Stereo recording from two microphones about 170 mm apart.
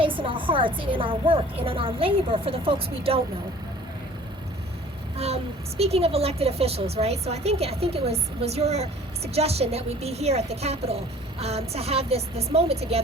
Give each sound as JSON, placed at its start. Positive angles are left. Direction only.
{"t": 0.0, "sound": "a woman's voice", "side_deg": -30}
{"t": 5.1, "sound": "a woman's voice", "side_deg": -35}